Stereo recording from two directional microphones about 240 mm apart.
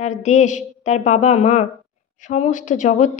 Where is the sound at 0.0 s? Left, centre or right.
Left.